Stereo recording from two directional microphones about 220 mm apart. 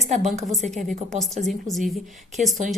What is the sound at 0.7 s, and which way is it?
A woman's voice, centre (ahead or behind).